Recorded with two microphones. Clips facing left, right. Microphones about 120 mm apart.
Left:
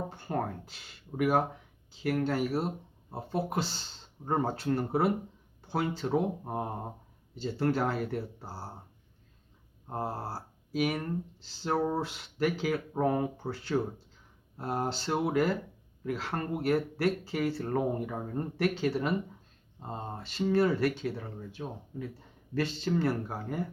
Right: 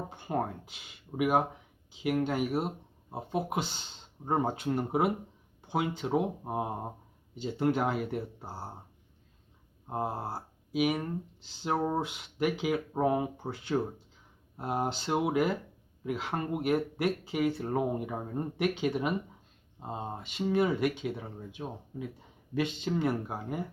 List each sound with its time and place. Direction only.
0.2 s speech: 10° right (ahead or behind)
9.8 s speech: 10° right (ahead or behind)
11.9 s speech: 15° right (ahead or behind)
19.8 s speech: 10° right (ahead or behind)